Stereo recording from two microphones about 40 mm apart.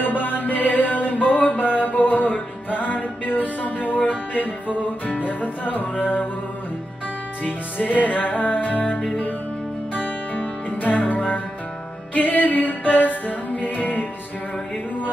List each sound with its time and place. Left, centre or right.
0.0 s mantra: left
4.3 s music: left
7.9 s music: left